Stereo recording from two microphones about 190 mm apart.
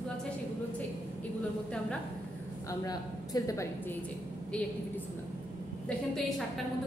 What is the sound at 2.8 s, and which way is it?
Speech, 20° left (ahead or behind).